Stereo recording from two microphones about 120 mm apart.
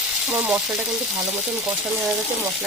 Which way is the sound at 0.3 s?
15° right (ahead or behind).